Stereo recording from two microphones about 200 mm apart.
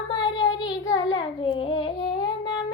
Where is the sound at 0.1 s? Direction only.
20° left (ahead or behind).